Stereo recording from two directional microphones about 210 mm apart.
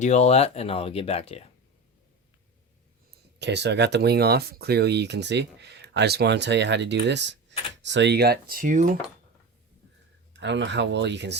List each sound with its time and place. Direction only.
0.0 s speech: 30° left (ahead or behind)
3.3 s speech: 55° right (ahead or behind); by 9.0 s 40° right (ahead or behind)
10.3 s speech: 55° right (ahead or behind)